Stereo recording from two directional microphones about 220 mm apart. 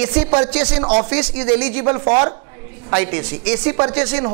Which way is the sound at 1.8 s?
25° right (ahead or behind).